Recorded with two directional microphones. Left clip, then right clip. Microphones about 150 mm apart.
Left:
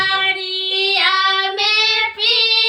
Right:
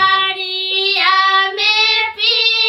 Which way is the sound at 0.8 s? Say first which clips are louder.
Right 2 dB; 25° right (ahead or behind).